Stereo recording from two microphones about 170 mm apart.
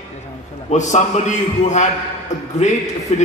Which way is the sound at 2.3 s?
45° left (ahead or behind).